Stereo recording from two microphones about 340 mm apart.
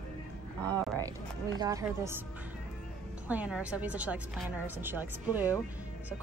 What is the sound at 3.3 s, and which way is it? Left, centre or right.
A woman's voice, centre.